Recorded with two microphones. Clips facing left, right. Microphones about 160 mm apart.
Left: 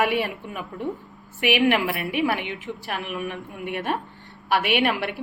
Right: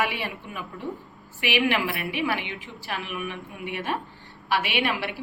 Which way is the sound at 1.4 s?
50° left (ahead or behind).